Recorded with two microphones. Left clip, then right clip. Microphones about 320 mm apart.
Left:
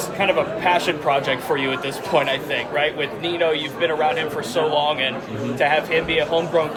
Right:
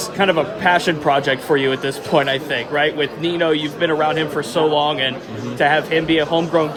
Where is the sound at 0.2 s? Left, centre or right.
Right.